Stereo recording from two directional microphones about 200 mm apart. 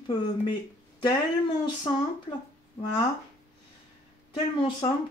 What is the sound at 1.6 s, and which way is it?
Speech, 25° left (ahead or behind).